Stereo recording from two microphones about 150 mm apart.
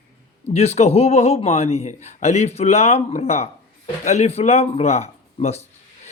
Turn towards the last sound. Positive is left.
turn(degrees=45)  # may be behind; listen again after turning